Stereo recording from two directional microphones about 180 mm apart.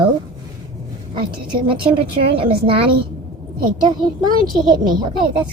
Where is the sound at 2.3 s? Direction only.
30° right (ahead or behind).